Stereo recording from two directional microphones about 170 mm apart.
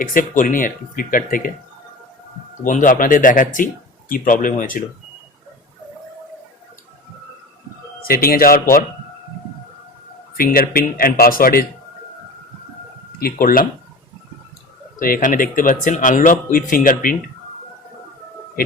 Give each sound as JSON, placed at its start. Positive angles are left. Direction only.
{"t": 0.0, "sound": "speech", "side_deg": 55}
{"t": 2.6, "sound": "speech", "side_deg": 50}
{"t": 8.0, "sound": "speech", "side_deg": 60}
{"t": 10.3, "sound": "speech", "side_deg": 60}
{"t": 13.1, "sound": "speech", "side_deg": 60}
{"t": 14.9, "sound": "speech", "side_deg": 55}